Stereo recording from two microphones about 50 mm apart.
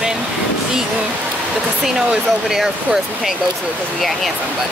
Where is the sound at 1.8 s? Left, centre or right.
Centre.